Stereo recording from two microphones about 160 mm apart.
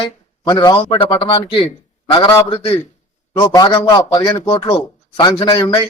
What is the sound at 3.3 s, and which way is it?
A man's voice, 25° left (ahead or behind).